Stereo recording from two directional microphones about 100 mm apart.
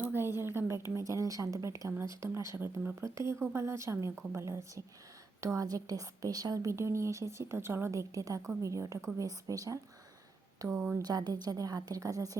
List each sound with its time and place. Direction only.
0.0 s a sound: 20° right (ahead or behind)
1.5 s a woman's voice: 35° right (ahead or behind)
10.7 s speech: 10° right (ahead or behind)
11.0 s a woman's voice: 40° right (ahead or behind)